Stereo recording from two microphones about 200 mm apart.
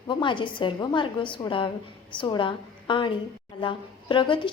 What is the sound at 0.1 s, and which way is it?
A woman's voice, 25° left (ahead or behind).